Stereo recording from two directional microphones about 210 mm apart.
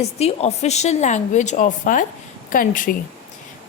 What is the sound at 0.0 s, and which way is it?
A woman's voice, 30° left (ahead or behind).